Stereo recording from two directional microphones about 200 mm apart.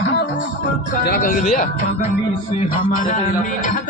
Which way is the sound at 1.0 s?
45° left (ahead or behind).